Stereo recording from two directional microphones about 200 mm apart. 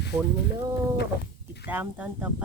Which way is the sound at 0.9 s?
55° left (ahead or behind).